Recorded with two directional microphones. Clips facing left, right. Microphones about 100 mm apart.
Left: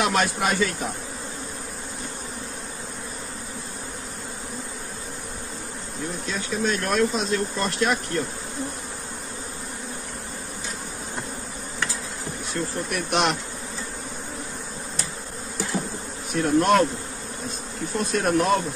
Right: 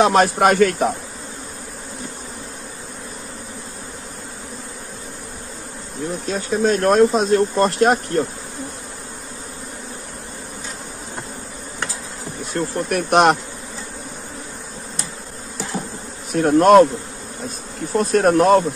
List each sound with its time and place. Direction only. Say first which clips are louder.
0.0 s speech: right 9 dB; 40° right (ahead or behind); by 0.9 s 65° right (ahead or behind)
6.2 s speech: right 8 dB; 40° right (ahead or behind)
12.5 s speech: right 7 dB; 55° right (ahead or behind)
16.3 s speech: right 7 dB; 50° right (ahead or behind)
17.9 s speech: right 7 dB; 45° right (ahead or behind)